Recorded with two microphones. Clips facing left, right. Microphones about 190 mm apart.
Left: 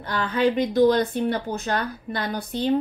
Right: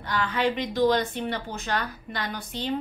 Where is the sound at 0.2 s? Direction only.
35° left (ahead or behind).